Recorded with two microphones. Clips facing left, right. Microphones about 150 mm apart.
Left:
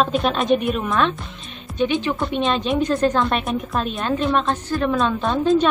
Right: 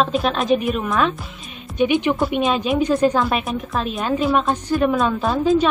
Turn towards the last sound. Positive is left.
turn(degrees=-5)  # may be behind; listen again after turning